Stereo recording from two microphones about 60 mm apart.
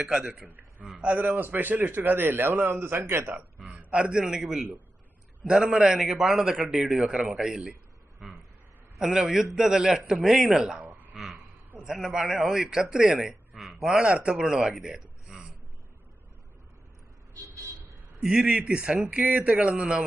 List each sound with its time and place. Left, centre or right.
0.0 s a man's voice: centre; by 3.4 s right
3.6 s a man's voice: right
11.1 s a sound: centre
11.8 s a man's voice: centre
13.6 s a sound: centre
13.9 s a man's voice: centre
15.2 s a sound: centre
17.4 s vehicle: right
18.2 s a man's voice: centre